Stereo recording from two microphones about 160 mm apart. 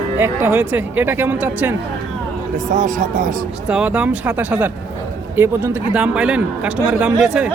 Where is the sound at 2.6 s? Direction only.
50° right (ahead or behind).